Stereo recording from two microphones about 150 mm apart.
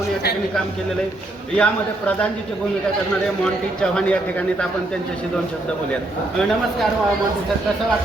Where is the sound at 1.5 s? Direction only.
10° left (ahead or behind).